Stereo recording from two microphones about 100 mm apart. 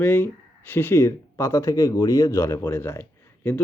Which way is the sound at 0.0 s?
20° left (ahead or behind).